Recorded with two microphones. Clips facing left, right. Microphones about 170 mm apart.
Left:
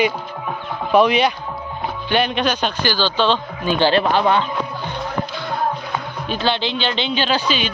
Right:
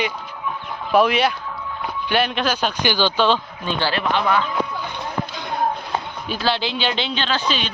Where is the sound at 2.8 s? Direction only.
15° right (ahead or behind).